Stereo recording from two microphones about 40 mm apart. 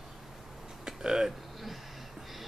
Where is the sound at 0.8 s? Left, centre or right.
Centre.